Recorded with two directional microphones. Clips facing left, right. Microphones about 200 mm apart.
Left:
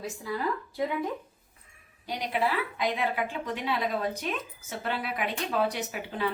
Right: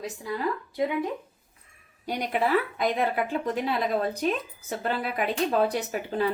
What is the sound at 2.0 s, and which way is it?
A woman's voice, 50° right (ahead or behind).